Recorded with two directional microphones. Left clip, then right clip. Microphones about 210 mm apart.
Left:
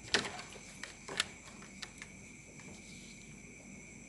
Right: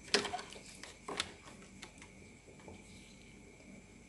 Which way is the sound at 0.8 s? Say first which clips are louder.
Left 3 dB; 15° right (ahead or behind).